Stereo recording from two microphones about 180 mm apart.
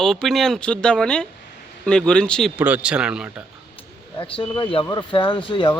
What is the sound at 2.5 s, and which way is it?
Speech, 10° right (ahead or behind).